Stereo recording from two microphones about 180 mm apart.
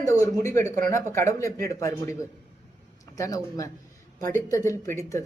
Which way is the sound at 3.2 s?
20° left (ahead or behind).